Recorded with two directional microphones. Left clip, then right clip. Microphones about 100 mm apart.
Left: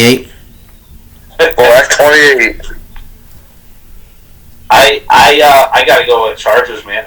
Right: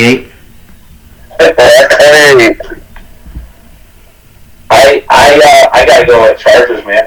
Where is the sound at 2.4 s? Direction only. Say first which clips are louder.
Right 5 dB; 25° left (ahead or behind).